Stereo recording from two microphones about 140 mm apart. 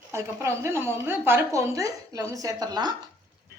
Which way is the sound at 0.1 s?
20° right (ahead or behind).